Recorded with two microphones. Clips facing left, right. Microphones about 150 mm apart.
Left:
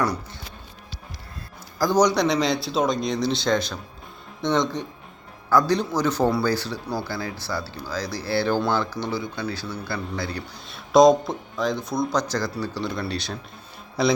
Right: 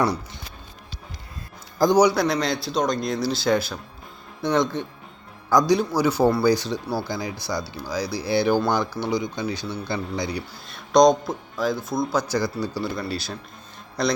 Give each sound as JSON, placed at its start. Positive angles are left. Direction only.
{"t": 1.8, "sound": "speech", "side_deg": -15}
{"t": 5.5, "sound": "speech", "side_deg": -15}
{"t": 10.7, "sound": "speech", "side_deg": 0}